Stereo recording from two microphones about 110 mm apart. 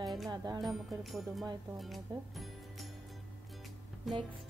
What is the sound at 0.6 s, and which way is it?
Speech, centre (ahead or behind).